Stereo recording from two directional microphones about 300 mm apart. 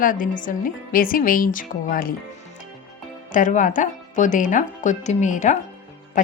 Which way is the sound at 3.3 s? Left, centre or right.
Left.